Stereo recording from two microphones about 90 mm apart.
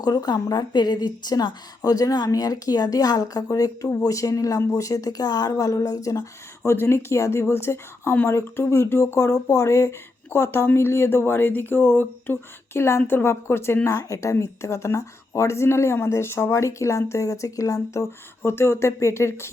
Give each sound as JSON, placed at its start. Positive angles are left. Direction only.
{"t": 0.0, "sound": "a woman's voice", "side_deg": 45}
{"t": 6.7, "sound": "speech", "side_deg": 30}